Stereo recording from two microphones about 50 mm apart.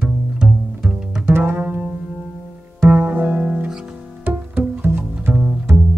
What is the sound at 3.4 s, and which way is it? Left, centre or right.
Music, centre.